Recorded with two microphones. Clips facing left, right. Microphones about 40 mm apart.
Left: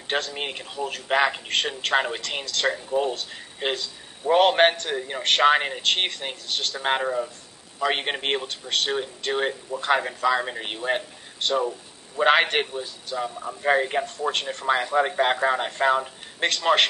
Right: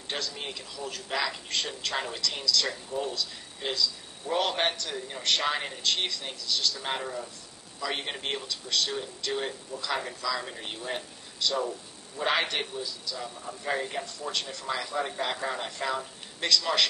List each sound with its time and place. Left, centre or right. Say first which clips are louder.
0.1 s a man's voice: left 8 dB; left